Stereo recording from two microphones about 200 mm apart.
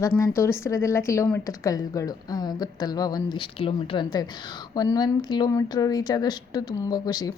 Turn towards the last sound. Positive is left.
turn(degrees=20)  # may be behind; listen again after turning